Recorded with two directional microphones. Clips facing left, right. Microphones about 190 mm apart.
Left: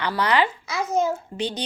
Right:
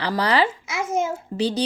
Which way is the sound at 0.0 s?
35° right (ahead or behind).